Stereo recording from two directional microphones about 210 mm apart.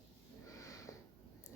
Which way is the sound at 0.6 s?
15° left (ahead or behind).